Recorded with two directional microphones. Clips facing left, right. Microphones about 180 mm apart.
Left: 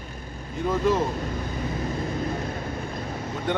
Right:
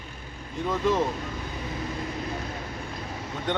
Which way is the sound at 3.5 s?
5° left (ahead or behind).